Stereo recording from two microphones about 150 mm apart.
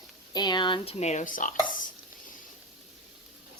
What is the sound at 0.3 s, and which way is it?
A woman's voice, 30° left (ahead or behind).